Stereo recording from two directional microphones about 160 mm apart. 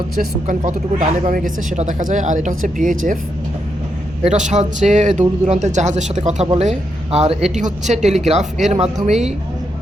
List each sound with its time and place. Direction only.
0.4 s speech: 55° right (ahead or behind)
4.2 s speech: 45° right (ahead or behind)